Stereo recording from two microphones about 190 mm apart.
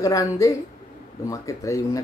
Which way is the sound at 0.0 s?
15° left (ahead or behind).